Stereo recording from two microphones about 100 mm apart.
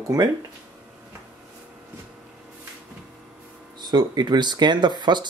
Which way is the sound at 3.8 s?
45° right (ahead or behind).